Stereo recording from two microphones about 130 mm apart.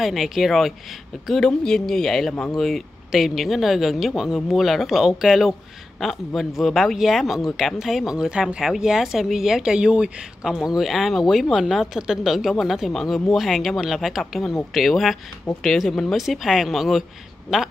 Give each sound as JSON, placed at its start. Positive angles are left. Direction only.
{"t": 0.0, "sound": "speech", "side_deg": 0}